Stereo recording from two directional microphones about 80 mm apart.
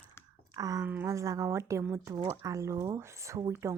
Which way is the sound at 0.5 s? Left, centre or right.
Right.